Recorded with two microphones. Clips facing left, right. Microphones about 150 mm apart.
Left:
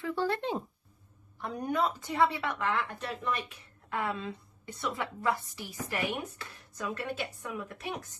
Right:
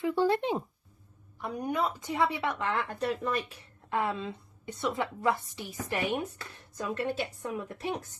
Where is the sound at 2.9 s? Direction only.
40° right (ahead or behind).